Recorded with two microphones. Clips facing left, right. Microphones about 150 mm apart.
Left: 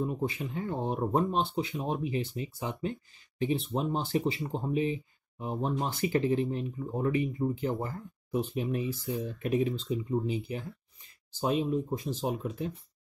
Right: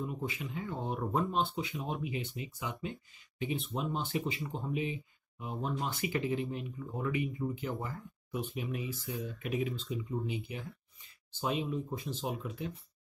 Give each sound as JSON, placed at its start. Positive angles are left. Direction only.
{"t": 0.0, "sound": "speech", "side_deg": 40}